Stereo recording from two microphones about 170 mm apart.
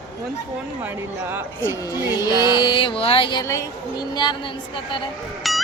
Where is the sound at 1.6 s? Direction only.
20° left (ahead or behind).